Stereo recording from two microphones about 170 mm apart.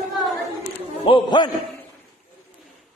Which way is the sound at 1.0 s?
30° left (ahead or behind).